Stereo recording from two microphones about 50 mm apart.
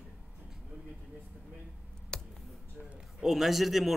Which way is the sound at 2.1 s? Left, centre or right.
Centre.